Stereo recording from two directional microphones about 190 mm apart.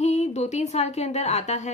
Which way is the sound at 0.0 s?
35° left (ahead or behind).